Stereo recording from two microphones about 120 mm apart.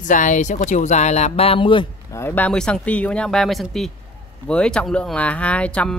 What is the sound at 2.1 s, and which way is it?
Speech, 20° left (ahead or behind).